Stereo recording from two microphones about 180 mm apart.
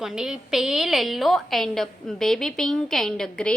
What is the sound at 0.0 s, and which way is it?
A woman's voice, centre (ahead or behind).